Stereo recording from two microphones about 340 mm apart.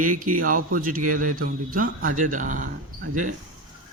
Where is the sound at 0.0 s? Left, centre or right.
Right.